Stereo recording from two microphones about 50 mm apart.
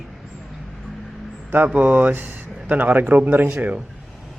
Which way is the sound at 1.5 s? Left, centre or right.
Right.